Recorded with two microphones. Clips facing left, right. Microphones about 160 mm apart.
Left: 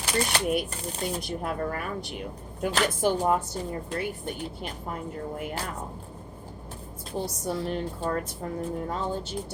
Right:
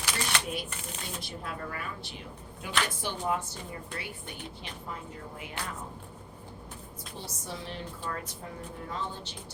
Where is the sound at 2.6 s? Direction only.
50° left (ahead or behind).